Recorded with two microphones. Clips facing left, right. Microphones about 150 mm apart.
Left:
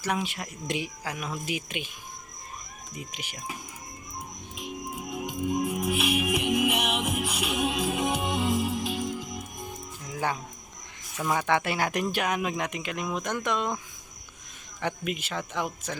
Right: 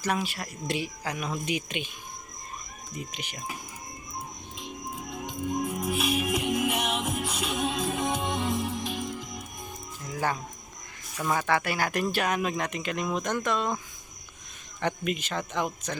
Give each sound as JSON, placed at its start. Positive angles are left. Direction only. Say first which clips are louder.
{"t": 0.0, "sound": "speech", "louder": "right 1 dB", "side_deg": 15}
{"t": 2.9, "sound": "speech", "louder": "right 2 dB", "side_deg": 10}
{"t": 5.0, "sound": "music", "louder": "left 3 dB", "side_deg": 10}
{"t": 11.3, "sound": "speech", "louder": "left 1 dB", "side_deg": 20}
{"t": 14.8, "sound": "speech", "louder": "right 2 dB", "side_deg": 10}